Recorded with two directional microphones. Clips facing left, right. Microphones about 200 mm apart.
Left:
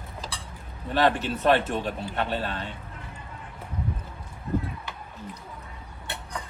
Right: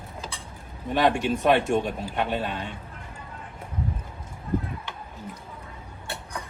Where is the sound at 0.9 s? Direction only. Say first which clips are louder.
Right 1 dB; 15° right (ahead or behind).